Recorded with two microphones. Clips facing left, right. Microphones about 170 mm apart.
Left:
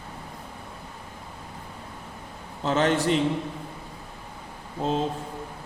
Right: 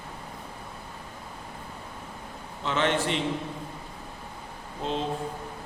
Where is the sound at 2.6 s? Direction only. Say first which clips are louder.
Left 4 dB; 40° left (ahead or behind).